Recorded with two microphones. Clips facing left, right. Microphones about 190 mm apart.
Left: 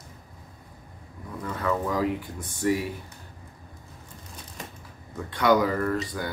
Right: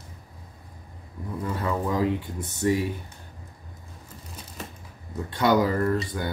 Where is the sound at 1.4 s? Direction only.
25° right (ahead or behind).